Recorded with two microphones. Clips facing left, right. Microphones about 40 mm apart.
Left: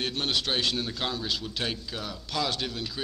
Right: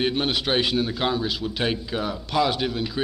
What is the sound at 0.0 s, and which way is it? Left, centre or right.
A man's voice, centre.